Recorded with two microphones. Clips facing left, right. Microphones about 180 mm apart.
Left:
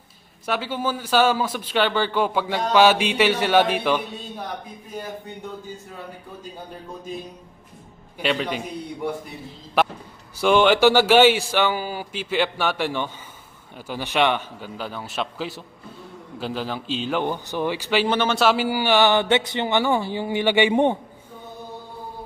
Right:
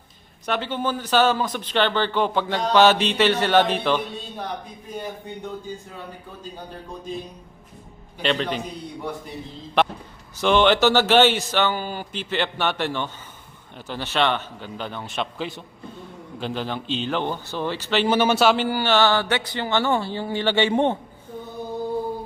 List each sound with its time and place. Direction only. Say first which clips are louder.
0.4 s a man's voice: even; 5° left (ahead or behind)
8.2 s a man's voice: even; 10° left (ahead or behind)
9.8 s a man's voice: even; 5° left (ahead or behind)
18.1 s a man's voice: right 4 dB; 5° right (ahead or behind); by 21.0 s 15° left (ahead or behind)